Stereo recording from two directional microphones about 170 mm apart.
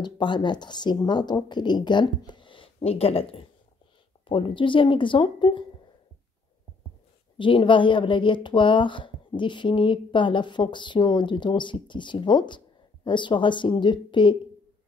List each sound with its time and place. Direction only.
0.0 s speech: 25° left (ahead or behind)
7.3 s speech: 30° left (ahead or behind)